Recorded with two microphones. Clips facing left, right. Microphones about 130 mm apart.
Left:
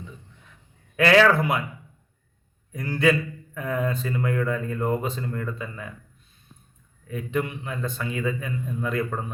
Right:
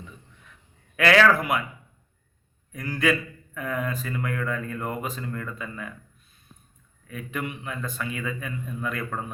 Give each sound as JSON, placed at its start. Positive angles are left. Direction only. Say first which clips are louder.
{"t": 0.9, "sound": "a man's voice", "louder": "left 2 dB", "side_deg": 25}
{"t": 2.7, "sound": "a man's voice", "louder": "left 3 dB", "side_deg": 30}
{"t": 7.1, "sound": "a man's voice", "louder": "left 5 dB", "side_deg": 30}